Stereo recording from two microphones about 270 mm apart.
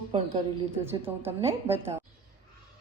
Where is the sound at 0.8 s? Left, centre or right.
Centre.